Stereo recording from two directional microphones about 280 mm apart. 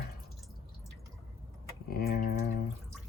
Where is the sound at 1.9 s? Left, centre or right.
Left.